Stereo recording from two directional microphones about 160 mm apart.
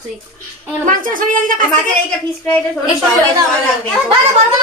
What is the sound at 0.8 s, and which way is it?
Speech, 55° right (ahead or behind).